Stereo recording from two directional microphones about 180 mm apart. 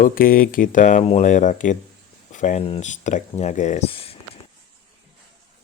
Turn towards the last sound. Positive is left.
turn(degrees=30)  # may be behind; listen again after turning